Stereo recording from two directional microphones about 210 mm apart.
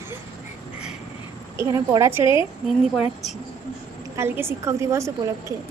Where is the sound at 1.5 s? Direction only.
15° right (ahead or behind).